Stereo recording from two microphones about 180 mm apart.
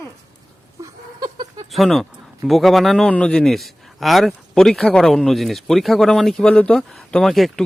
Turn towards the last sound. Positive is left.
turn(degrees=0)  # may be behind; listen again after turning